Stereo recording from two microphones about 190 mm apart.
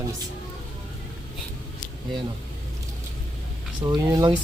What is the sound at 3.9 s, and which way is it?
Speech, 20° right (ahead or behind).